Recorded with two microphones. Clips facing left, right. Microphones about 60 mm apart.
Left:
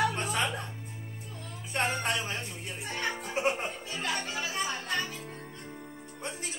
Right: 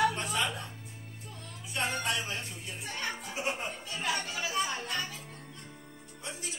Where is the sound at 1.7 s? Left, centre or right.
Left.